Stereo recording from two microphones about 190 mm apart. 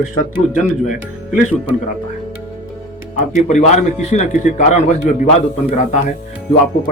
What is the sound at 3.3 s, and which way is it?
A man's voice, 40° left (ahead or behind).